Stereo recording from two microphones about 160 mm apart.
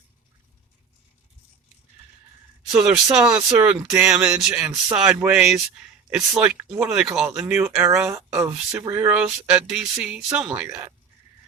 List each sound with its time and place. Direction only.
2.7 s speech: 5° right (ahead or behind)
8.1 s speech: 20° right (ahead or behind)